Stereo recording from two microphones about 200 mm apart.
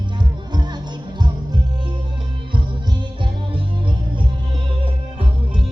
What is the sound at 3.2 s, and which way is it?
Music, 25° right (ahead or behind).